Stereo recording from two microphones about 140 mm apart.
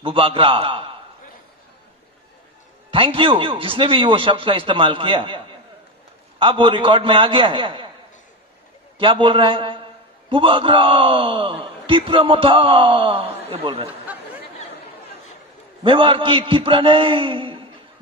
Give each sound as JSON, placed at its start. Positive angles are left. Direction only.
{"t": 0.0, "sound": "speech", "side_deg": -40}
{"t": 2.9, "sound": "speech", "side_deg": -40}
{"t": 6.4, "sound": "speech", "side_deg": -35}
{"t": 8.9, "sound": "a man's voice", "side_deg": -40}
{"t": 15.8, "sound": "speech", "side_deg": -35}